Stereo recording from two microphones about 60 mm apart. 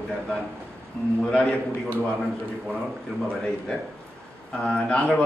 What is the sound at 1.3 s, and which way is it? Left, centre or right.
Speech, centre.